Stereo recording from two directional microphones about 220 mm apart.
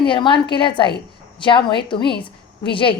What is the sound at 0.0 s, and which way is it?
A woman's voice, 20° left (ahead or behind).